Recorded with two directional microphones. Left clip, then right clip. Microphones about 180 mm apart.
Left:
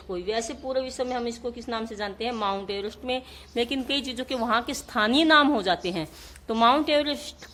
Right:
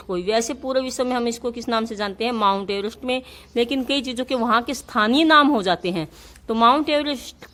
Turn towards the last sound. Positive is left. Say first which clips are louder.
# right 2 dB
turn(degrees=-30)  # may be behind; listen again after turning